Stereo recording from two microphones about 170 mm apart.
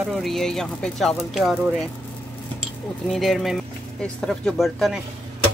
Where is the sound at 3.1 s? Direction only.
Centre (ahead or behind).